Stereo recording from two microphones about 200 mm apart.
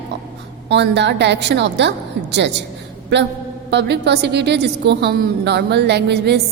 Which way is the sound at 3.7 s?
55° right (ahead or behind).